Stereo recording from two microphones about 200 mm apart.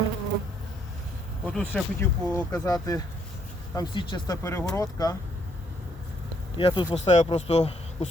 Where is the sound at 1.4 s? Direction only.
5° left (ahead or behind).